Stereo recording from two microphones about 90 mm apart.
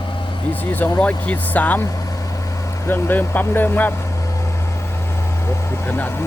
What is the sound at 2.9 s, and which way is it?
Speech, 20° left (ahead or behind).